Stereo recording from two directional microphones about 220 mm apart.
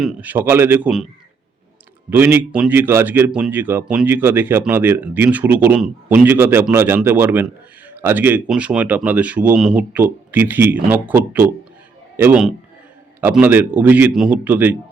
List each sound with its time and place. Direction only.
0.0 s speech: 5° right (ahead or behind)
2.0 s a man's voice: 10° right (ahead or behind)